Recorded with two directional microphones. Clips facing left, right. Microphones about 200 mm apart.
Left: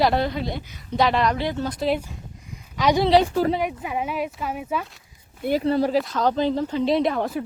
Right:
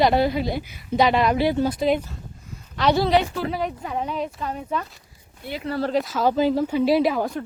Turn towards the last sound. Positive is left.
turn(degrees=0)  # may be behind; listen again after turning